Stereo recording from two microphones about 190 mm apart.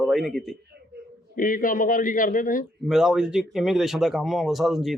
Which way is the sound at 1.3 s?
45° left (ahead or behind).